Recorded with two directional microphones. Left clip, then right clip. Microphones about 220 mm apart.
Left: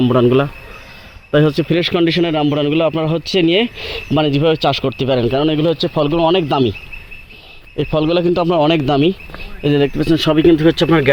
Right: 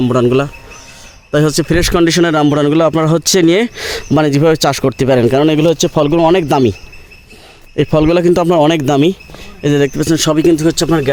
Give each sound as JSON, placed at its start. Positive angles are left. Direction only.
{"t": 0.0, "sound": "a man's voice", "side_deg": -10}
{"t": 7.8, "sound": "a man's voice", "side_deg": -35}